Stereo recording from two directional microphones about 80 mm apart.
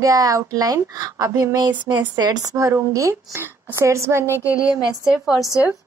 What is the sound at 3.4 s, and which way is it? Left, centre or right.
Speech, right.